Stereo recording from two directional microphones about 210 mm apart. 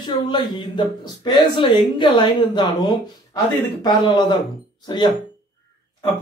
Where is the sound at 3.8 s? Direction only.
20° left (ahead or behind).